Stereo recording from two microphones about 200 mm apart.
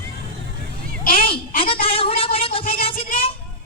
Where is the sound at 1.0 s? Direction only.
45° left (ahead or behind).